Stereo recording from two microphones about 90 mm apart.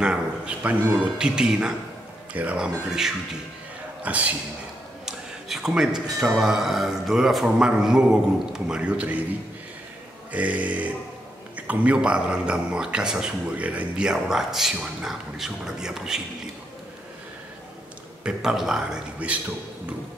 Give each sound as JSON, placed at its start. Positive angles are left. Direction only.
{"t": 0.0, "sound": "a man's voice", "side_deg": -10}
{"t": 5.0, "sound": "a sound", "side_deg": -5}
{"t": 6.1, "sound": "speech", "side_deg": -5}
{"t": 10.3, "sound": "a man's voice", "side_deg": -15}
{"t": 18.2, "sound": "a man's voice", "side_deg": -5}